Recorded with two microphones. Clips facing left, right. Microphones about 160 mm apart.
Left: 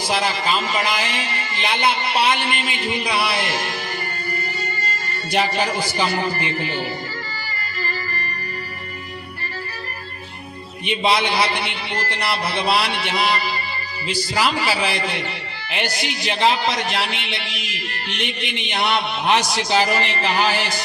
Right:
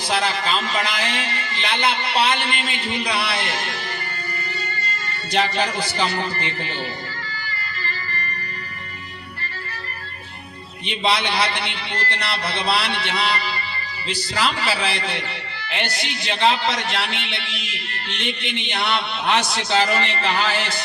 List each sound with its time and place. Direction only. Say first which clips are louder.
0.1 s a man's voice: even; 10° left (ahead or behind)
5.3 s a man's voice: left 1 dB; 10° left (ahead or behind)
10.8 s a man's voice: left 3 dB; 10° left (ahead or behind)